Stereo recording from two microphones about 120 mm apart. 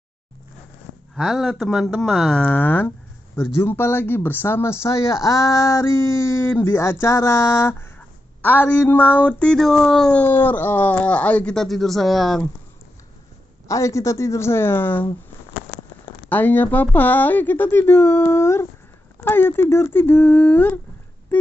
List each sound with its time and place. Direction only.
1.1 s speech: centre (ahead or behind)
13.7 s speech: 25° left (ahead or behind)
16.3 s speech: 15° left (ahead or behind)
21.3 s a sound: 15° left (ahead or behind)